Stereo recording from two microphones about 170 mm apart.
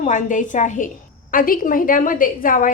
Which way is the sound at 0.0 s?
45° left (ahead or behind).